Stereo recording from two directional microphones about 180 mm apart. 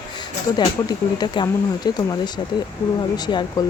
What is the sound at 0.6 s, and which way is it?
Speech, 25° left (ahead or behind).